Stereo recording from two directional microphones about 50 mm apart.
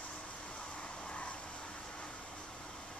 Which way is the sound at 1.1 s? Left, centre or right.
Left.